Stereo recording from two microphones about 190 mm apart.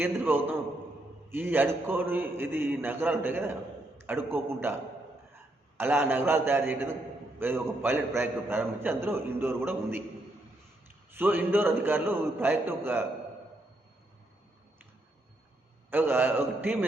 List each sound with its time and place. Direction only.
0.0 s a man's voice: 10° right (ahead or behind)
11.1 s a man's voice: 10° right (ahead or behind)
15.9 s a man's voice: 10° right (ahead or behind)